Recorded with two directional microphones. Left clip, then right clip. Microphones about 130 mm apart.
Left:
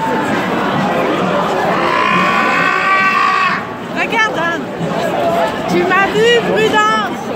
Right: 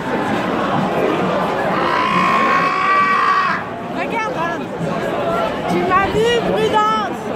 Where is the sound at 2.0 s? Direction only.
5° left (ahead or behind).